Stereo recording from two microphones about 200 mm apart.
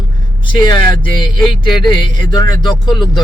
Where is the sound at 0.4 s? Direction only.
20° left (ahead or behind).